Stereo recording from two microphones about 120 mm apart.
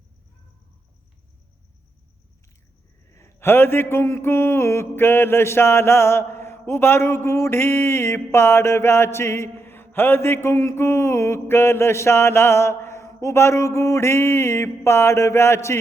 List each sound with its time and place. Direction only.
3.1 s mantra: 20° left (ahead or behind)